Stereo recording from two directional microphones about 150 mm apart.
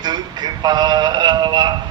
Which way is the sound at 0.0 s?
30° right (ahead or behind).